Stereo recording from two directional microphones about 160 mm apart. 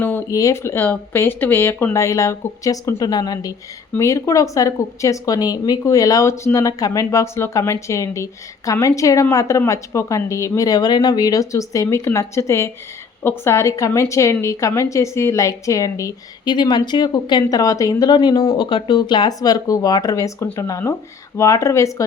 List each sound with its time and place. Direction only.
0.0 s a woman's voice: 10° left (ahead or behind)